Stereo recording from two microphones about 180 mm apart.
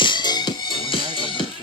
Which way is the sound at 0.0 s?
25° left (ahead or behind).